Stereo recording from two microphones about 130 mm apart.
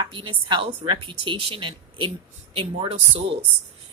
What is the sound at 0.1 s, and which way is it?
A woman's voice, 40° right (ahead or behind).